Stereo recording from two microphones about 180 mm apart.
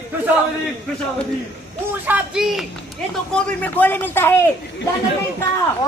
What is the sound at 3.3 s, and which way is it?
Speech, 10° left (ahead or behind).